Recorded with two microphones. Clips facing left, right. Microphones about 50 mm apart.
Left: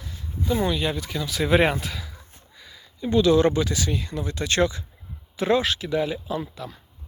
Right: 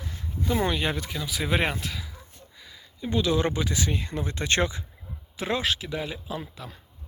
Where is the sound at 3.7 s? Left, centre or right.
Right.